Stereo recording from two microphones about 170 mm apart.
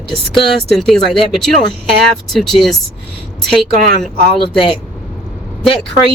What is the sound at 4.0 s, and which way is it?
Speech, 35° left (ahead or behind).